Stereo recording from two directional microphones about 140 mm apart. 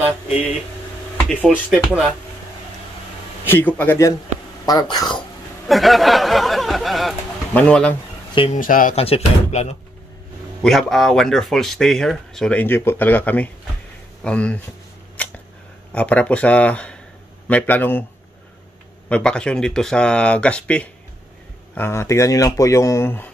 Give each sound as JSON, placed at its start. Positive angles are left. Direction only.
{"t": 1.3, "sound": "speech", "side_deg": 5}
{"t": 3.4, "sound": "speech", "side_deg": 15}
{"t": 4.6, "sound": "speech", "side_deg": 25}
{"t": 5.7, "sound": "speech", "side_deg": 0}
{"t": 8.5, "sound": "speech", "side_deg": 75}
{"t": 8.9, "sound": "speech", "side_deg": 45}
{"t": 10.6, "sound": "speech", "side_deg": 0}
{"t": 15.2, "sound": "a sound", "side_deg": 10}
{"t": 15.9, "sound": "speech", "side_deg": 10}
{"t": 19.0, "sound": "speech", "side_deg": 10}